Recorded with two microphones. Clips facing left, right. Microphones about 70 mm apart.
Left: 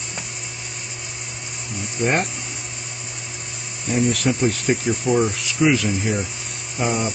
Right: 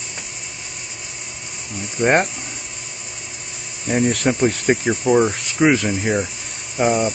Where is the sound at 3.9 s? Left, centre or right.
Right.